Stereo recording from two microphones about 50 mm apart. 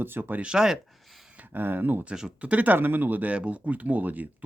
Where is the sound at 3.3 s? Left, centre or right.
Right.